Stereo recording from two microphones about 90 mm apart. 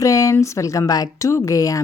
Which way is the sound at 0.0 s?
35° left (ahead or behind).